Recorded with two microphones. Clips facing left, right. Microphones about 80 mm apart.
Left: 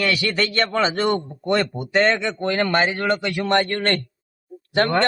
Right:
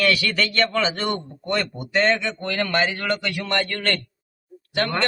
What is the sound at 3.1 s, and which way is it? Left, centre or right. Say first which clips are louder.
Speech: left 3 dB; centre.